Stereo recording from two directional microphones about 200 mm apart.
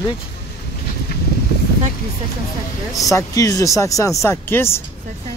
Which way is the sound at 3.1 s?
15° left (ahead or behind).